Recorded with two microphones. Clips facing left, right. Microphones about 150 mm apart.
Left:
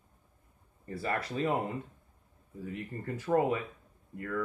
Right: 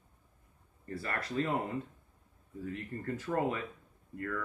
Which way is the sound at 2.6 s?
15° left (ahead or behind).